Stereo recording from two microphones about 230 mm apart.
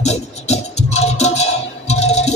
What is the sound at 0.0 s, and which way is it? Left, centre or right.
Music, left.